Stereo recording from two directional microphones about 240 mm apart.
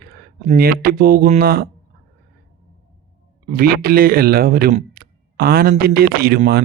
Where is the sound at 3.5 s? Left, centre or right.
Right.